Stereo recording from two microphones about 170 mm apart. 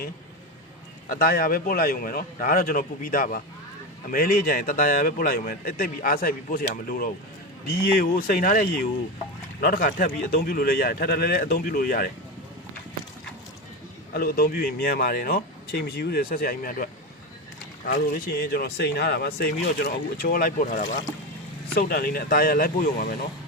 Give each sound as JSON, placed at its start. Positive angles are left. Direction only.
{"t": 1.0, "sound": "speech", "side_deg": 60}
{"t": 14.1, "sound": "speech", "side_deg": 65}
{"t": 17.8, "sound": "speech", "side_deg": 70}
{"t": 21.8, "sound": "speech", "side_deg": 60}